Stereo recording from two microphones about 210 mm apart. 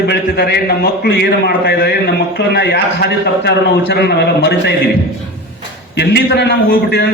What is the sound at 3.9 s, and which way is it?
Speech, 55° left (ahead or behind).